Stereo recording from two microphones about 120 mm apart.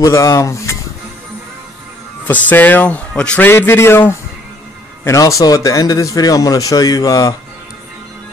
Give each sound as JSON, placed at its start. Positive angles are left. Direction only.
{"t": 0.0, "sound": "speech", "side_deg": 25}
{"t": 2.2, "sound": "a man's voice", "side_deg": 15}